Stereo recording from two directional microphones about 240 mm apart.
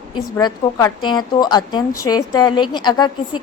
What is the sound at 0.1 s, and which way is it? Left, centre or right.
A woman's voice, centre.